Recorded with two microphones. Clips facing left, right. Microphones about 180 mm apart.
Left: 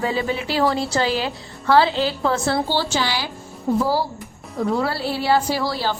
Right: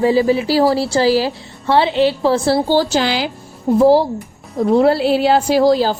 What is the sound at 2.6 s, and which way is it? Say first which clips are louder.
A woman's voice: right 7 dB; 45° right (ahead or behind).